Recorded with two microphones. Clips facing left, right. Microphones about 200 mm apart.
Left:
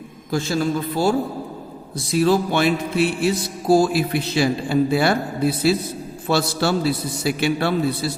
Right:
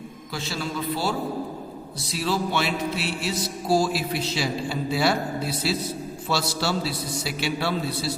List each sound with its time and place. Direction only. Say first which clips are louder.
0.3 s music: left 10 dB; 45° left (ahead or behind)
2.1 s music: left 8 dB; 50° left (ahead or behind)